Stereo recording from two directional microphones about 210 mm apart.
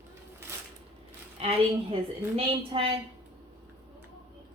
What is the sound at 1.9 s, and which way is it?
Speech, 25° right (ahead or behind).